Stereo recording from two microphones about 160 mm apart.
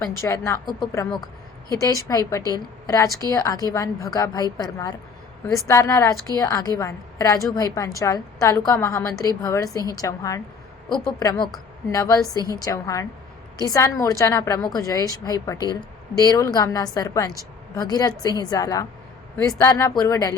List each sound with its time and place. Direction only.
0.2 s a woman's voice: 20° left (ahead or behind)